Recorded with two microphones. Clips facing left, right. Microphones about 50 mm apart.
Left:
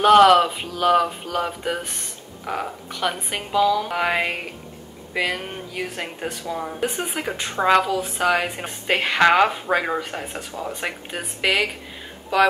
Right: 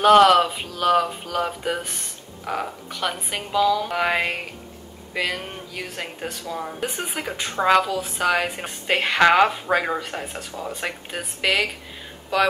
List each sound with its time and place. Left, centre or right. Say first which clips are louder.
0.0 s a woman's voice: left 1 dB; centre